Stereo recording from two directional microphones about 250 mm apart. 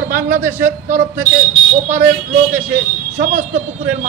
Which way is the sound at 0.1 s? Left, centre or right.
Centre.